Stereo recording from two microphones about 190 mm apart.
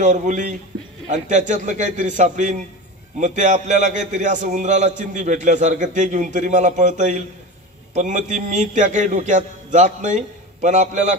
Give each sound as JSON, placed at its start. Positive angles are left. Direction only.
{"t": 0.0, "sound": "a man's voice", "side_deg": -40}